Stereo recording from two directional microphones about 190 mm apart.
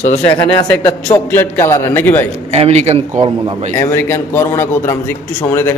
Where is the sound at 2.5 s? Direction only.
35° right (ahead or behind).